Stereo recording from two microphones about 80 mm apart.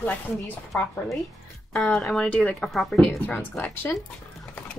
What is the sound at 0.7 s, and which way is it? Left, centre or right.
Speech, centre.